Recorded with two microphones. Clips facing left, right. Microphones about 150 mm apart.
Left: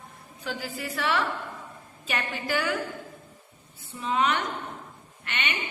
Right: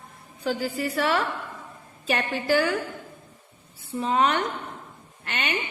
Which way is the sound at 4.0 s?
40° right (ahead or behind).